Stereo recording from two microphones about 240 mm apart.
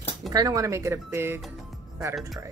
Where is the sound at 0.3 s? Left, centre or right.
Centre.